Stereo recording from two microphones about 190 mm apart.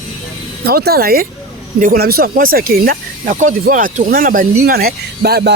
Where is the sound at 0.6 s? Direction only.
55° right (ahead or behind).